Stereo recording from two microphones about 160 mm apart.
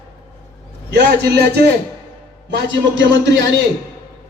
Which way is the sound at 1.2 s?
90° right.